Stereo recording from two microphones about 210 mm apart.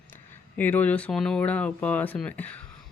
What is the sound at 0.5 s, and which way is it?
Speech, 10° left (ahead or behind).